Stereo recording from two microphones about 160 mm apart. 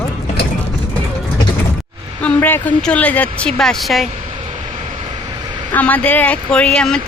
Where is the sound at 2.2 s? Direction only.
10° left (ahead or behind).